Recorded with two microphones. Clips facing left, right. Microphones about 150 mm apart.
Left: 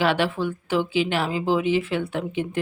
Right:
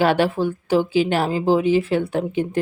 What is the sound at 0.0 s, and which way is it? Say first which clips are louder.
Speech: right 4 dB; 45° right (ahead or behind).